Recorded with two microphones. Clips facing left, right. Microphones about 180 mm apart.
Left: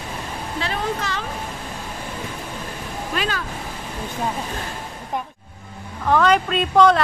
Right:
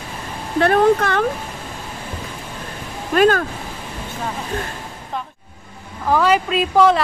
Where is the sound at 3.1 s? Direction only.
50° right (ahead or behind).